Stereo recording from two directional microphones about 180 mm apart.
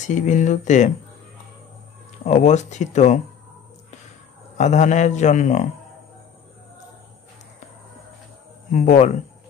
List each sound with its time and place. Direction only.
0.0 s speech: 40° left (ahead or behind)
2.2 s a man's voice: 40° left (ahead or behind)
4.6 s a man's voice: 40° left (ahead or behind)
8.7 s speech: 40° left (ahead or behind)